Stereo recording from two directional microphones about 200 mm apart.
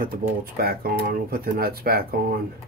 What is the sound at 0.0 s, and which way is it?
Speech, 45° right (ahead or behind).